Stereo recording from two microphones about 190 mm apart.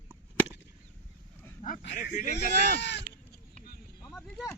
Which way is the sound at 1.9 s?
40° left (ahead or behind).